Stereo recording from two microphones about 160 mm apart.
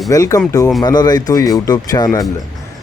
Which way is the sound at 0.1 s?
20° left (ahead or behind).